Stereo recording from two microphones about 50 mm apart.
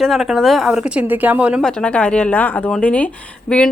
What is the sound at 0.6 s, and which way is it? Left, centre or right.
Speech, centre.